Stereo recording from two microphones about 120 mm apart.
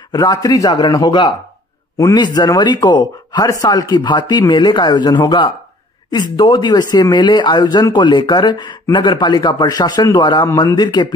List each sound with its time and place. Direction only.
0.1 s speech: 30° left (ahead or behind)